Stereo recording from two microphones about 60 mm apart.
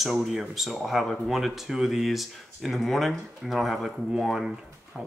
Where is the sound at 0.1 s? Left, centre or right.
Centre.